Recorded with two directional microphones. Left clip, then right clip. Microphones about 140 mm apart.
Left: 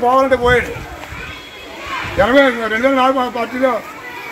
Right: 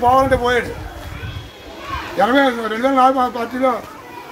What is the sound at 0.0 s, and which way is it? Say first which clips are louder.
Speech: left 1 dB; 25° right (ahead or behind).